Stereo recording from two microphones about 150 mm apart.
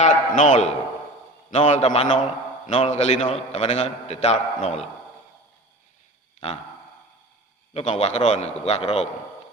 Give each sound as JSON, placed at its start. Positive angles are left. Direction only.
{"t": 0.0, "sound": "a man's voice", "side_deg": 50}
{"t": 7.7, "sound": "a man's voice", "side_deg": 45}